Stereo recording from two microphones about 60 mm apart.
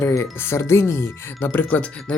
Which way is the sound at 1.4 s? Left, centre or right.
Left.